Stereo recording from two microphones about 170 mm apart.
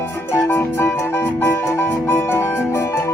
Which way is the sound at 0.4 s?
15° left (ahead or behind).